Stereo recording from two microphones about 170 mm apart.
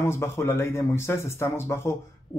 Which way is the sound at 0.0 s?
15° left (ahead or behind).